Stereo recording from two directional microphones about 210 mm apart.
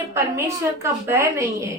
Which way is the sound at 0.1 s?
15° right (ahead or behind).